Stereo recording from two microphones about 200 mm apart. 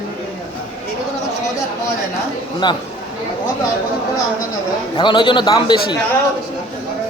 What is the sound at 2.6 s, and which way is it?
Speech, 20° left (ahead or behind).